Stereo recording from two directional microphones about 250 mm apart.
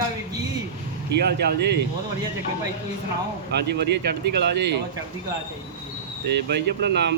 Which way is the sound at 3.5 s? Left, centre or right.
Right.